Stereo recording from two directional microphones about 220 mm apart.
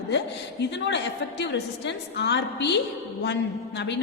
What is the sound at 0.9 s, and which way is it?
A woman's voice, 50° left (ahead or behind).